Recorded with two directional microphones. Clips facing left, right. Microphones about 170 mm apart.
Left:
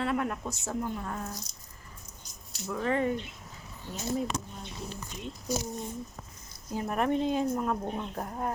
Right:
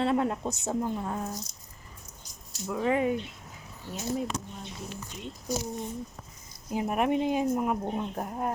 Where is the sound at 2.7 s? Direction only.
10° right (ahead or behind).